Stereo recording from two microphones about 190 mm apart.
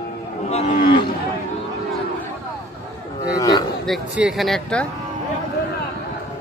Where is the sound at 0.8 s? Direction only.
55° left (ahead or behind).